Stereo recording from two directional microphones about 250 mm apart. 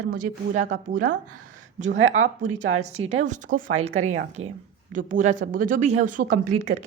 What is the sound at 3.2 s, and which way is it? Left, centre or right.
Speech, right.